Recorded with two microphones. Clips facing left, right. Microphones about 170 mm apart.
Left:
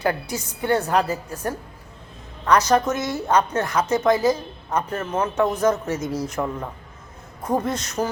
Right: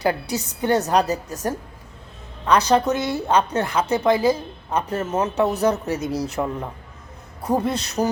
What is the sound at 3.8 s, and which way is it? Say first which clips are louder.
A woman's voice: even; 30° right (ahead or behind).